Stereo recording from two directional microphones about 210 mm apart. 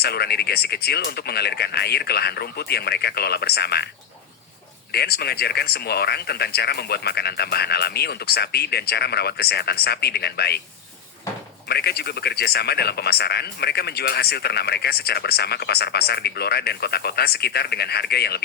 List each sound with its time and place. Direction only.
0.0 s a man's voice: 50° left (ahead or behind)
4.9 s a man's voice: 50° left (ahead or behind)
11.7 s a man's voice: 50° left (ahead or behind)